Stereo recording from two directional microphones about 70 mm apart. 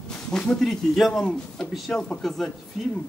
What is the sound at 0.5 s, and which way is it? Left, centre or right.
Speech, centre.